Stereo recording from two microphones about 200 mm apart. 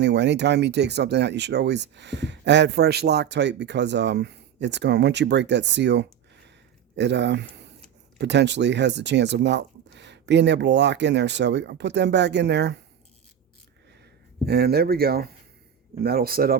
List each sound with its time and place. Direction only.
0.0 s speech: 60° right (ahead or behind)
14.4 s speech: 55° right (ahead or behind)